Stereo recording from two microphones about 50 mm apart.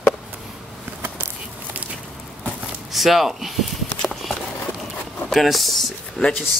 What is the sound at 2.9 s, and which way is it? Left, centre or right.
Speech, centre.